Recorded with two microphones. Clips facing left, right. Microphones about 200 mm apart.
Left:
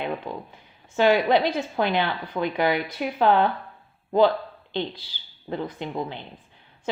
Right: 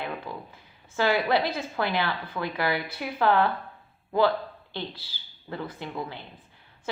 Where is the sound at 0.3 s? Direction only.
15° left (ahead or behind).